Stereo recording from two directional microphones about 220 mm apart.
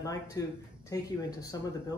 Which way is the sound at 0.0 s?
15° left (ahead or behind).